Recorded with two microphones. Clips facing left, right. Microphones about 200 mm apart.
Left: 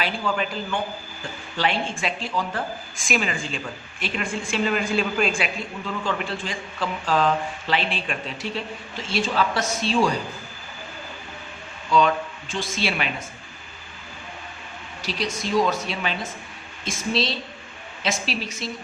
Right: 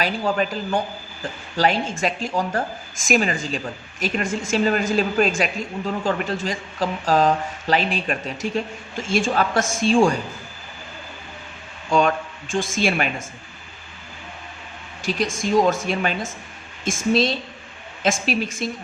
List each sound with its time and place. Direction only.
0.0 s speech: 40° right (ahead or behind)
11.9 s speech: 50° right (ahead or behind)
15.0 s speech: 45° right (ahead or behind)